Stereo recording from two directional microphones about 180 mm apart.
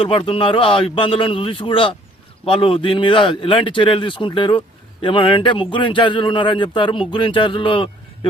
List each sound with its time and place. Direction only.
0.0 s speech: 30° left (ahead or behind)